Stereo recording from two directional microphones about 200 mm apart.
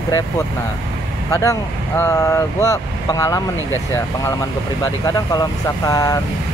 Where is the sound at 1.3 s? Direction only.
15° left (ahead or behind).